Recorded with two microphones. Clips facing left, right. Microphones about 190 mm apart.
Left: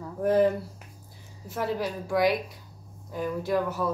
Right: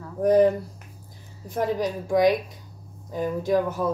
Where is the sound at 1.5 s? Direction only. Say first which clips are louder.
Right 4 dB; 20° right (ahead or behind).